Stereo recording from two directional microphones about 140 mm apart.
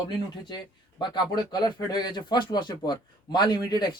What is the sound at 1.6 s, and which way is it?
A man's voice, 30° left (ahead or behind).